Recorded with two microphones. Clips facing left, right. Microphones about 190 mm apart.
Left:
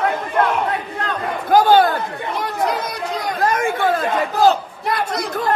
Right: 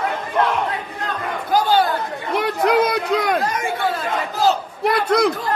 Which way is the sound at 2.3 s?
65° right (ahead or behind).